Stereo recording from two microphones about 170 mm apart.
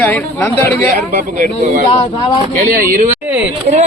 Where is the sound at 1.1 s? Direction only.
55° right (ahead or behind).